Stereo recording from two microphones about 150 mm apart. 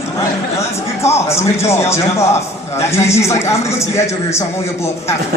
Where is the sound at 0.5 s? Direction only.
20° left (ahead or behind).